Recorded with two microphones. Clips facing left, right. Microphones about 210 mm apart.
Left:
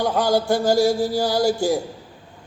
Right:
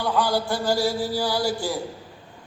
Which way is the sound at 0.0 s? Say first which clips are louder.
Left 4 dB; 45° left (ahead or behind).